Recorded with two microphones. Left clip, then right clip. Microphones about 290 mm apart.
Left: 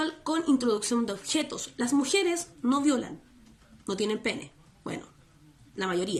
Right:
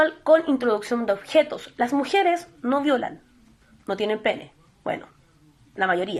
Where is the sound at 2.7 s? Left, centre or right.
Centre.